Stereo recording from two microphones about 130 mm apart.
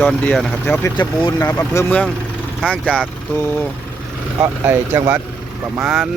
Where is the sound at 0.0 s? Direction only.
10° left (ahead or behind).